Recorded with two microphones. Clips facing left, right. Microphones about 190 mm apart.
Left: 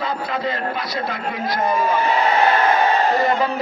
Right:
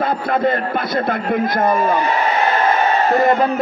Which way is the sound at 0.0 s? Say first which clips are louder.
Right 6 dB; 55° right (ahead or behind).